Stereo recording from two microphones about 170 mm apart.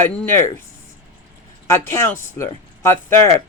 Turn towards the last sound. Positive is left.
turn(degrees=15)  # may be behind; listen again after turning